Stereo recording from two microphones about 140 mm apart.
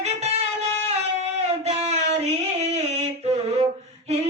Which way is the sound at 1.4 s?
50° right (ahead or behind).